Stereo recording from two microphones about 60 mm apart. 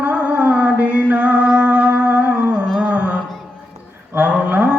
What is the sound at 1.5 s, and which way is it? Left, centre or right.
Music, centre.